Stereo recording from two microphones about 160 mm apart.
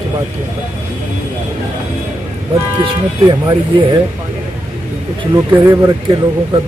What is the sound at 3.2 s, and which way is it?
Speech, 30° right (ahead or behind).